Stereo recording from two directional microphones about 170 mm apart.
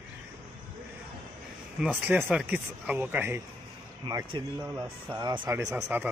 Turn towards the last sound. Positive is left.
turn(degrees=-10)  # may be behind; listen again after turning